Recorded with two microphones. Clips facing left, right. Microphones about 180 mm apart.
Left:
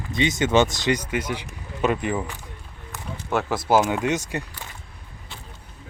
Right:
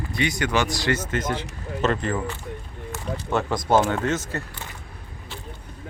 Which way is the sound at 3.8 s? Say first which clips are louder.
Even; 15° left (ahead or behind).